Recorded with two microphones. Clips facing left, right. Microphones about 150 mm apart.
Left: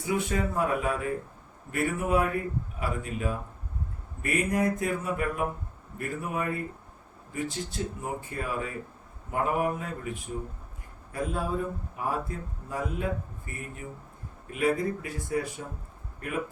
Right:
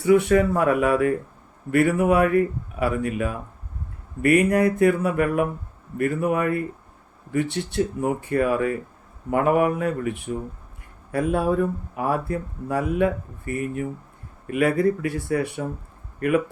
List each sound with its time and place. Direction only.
0.0 s speech: 70° right (ahead or behind)